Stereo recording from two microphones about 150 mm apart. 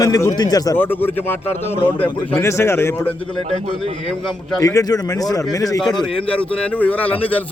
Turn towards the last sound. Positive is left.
turn(degrees=10)  # may be behind; listen again after turning